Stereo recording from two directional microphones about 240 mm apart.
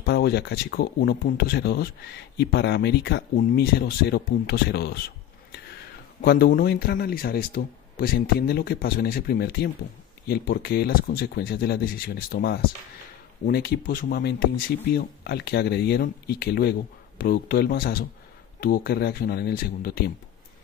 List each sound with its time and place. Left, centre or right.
0.0 s speech: left
6.2 s speech: left